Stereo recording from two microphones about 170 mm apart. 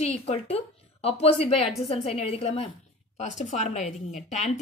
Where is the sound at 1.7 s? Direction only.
Centre (ahead or behind).